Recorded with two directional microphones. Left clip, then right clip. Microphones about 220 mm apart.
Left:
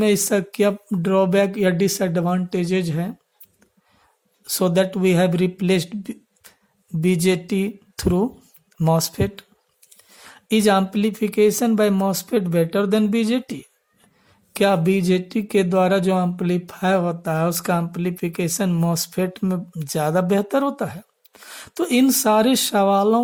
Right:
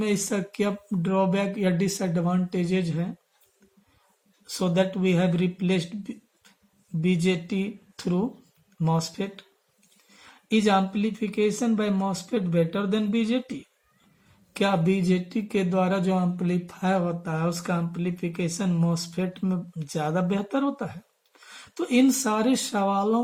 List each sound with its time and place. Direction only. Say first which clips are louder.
0.0 s speech: left 8 dB; 45° left (ahead or behind)
4.4 s speech: left 6 dB; 50° left (ahead or behind)